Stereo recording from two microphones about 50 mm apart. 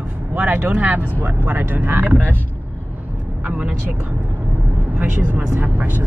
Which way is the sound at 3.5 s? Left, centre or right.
Right.